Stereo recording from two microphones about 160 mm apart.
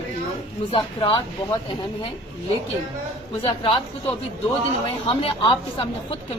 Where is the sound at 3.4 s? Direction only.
35° left (ahead or behind).